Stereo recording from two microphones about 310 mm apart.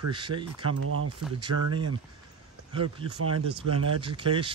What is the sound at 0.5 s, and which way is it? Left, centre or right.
Speech, right.